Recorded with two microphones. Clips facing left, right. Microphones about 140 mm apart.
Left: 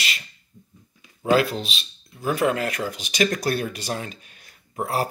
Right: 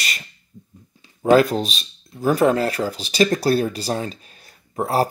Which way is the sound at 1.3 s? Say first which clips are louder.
Right 5 dB; 40° right (ahead or behind).